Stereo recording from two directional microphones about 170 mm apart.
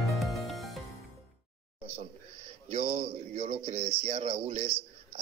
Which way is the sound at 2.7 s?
40° right (ahead or behind).